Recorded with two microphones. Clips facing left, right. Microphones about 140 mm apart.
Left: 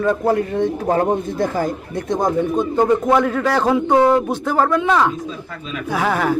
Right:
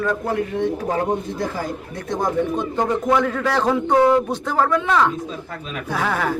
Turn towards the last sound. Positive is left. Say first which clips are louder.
# left 4 dB
turn(degrees=10)  # may be behind; listen again after turning